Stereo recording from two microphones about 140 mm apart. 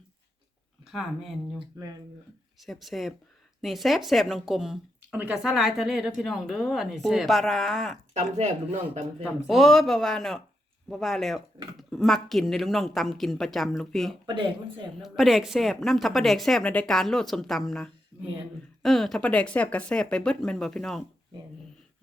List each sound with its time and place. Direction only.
2.6 s speech: centre (ahead or behind)
8.1 s speech: 55° right (ahead or behind)
9.2 s speech: centre (ahead or behind)
14.3 s speech: 35° right (ahead or behind)
15.0 s speech: centre (ahead or behind)